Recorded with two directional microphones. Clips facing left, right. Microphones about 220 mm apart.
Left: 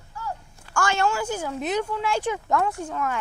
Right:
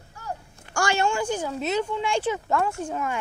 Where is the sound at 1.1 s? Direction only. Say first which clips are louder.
Right 1 dB; 5° left (ahead or behind).